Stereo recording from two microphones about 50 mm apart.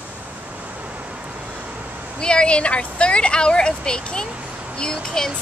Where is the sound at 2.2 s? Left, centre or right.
Centre.